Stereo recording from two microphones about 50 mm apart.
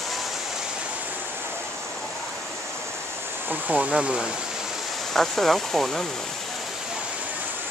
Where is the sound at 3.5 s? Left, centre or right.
Right.